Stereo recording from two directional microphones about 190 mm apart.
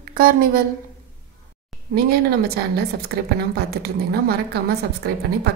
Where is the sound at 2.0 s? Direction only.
55° right (ahead or behind).